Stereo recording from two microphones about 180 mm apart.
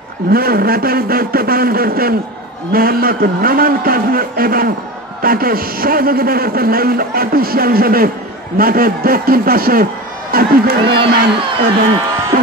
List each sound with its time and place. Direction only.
0.3 s a man's voice: 55° right (ahead or behind)